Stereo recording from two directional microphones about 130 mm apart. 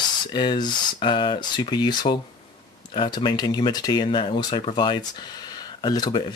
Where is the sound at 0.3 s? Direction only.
35° left (ahead or behind).